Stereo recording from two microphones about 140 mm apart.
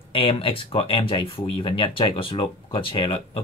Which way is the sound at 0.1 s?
40° left (ahead or behind).